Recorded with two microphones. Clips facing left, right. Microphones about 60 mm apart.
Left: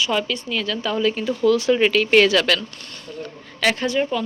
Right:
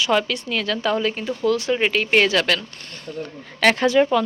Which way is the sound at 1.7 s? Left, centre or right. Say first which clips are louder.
Left 3 dB; right.